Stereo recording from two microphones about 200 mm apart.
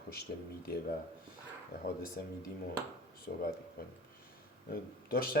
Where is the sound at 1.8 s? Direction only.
50° left (ahead or behind).